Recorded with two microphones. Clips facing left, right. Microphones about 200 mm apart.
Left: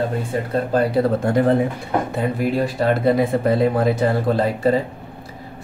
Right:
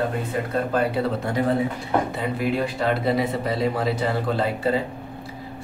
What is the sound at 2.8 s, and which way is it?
Speech, 45° left (ahead or behind).